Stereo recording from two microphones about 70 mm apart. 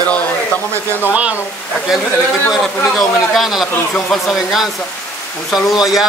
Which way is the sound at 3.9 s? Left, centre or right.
Centre.